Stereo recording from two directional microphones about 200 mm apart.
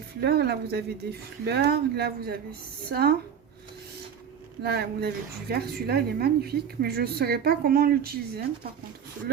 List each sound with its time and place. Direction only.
0.2 s speech: 55° right (ahead or behind)
4.6 s speech: 55° right (ahead or behind)